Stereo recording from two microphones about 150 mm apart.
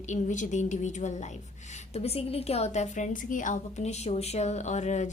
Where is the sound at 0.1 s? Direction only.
55° left (ahead or behind).